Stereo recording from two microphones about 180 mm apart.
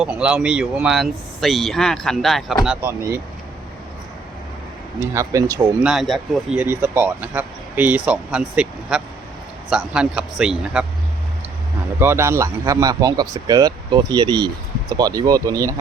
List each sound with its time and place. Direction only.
0.0 s speech: 5° right (ahead or behind)
2.6 s speech: 10° right (ahead or behind)
5.1 s speech: 20° right (ahead or behind)
5.8 s speech: centre (ahead or behind)
11.9 s speech: 15° right (ahead or behind)